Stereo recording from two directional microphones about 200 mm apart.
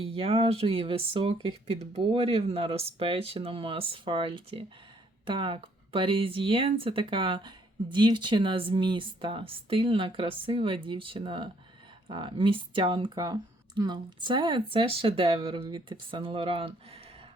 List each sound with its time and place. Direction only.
0.0 s speech: 30° right (ahead or behind)